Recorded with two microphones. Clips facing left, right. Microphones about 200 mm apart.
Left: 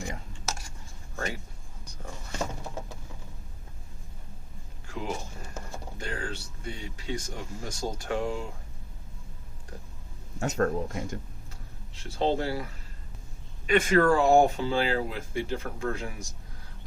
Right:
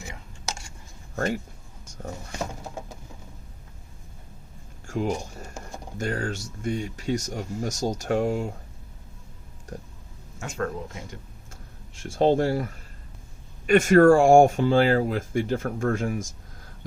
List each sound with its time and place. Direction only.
1.1 s speech: 45° right (ahead or behind)
1.8 s a sound: 40° right (ahead or behind)
2.3 s bird: 10° right (ahead or behind)
4.9 s speech: 45° right (ahead or behind)
10.4 s speech: 40° left (ahead or behind)
11.9 s speech: 45° right (ahead or behind)